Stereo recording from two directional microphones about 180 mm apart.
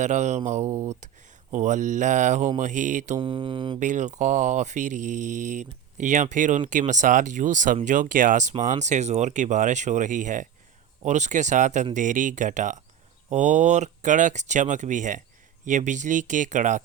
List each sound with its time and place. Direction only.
0.0 s speech: 40° right (ahead or behind)
3.2 s mantra: 30° right (ahead or behind)
3.8 s speech: 40° right (ahead or behind)